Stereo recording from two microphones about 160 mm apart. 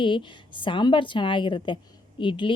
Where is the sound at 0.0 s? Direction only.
30° left (ahead or behind).